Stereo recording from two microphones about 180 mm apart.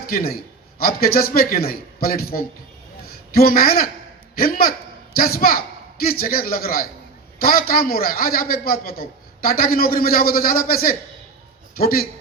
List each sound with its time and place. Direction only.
0.1 s a man's voice: 55° left (ahead or behind)